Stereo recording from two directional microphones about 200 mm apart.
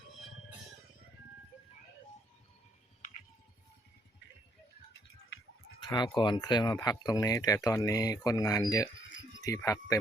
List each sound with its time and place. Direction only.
5.8 s speech: 20° left (ahead or behind)
9.0 s a sound: 70° left (ahead or behind)
9.4 s speech: 15° left (ahead or behind)